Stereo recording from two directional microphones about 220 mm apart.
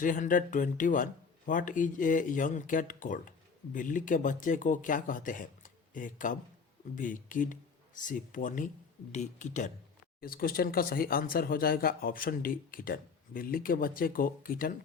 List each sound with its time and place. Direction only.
0.0 s speech: 35° left (ahead or behind)